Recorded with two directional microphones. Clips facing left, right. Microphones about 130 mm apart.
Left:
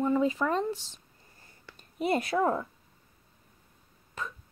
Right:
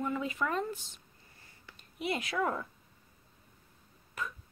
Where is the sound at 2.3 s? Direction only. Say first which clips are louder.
Left 6 dB; 30° left (ahead or behind).